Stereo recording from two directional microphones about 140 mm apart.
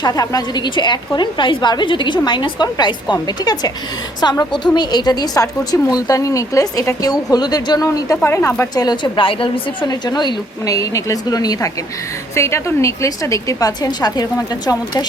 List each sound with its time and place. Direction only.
0.0 s a woman's voice: 30° left (ahead or behind)
8.7 s a woman's voice: 30° left (ahead or behind)